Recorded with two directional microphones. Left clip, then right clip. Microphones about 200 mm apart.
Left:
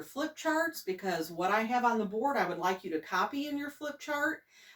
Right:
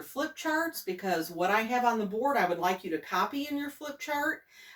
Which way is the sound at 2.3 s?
20° left (ahead or behind).